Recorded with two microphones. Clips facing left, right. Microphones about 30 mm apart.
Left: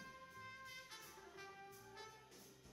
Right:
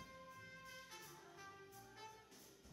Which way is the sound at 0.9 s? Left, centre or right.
Left.